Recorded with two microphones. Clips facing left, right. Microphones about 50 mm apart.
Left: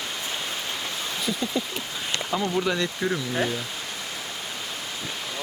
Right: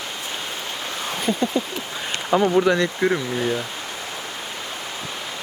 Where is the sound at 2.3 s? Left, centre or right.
Right.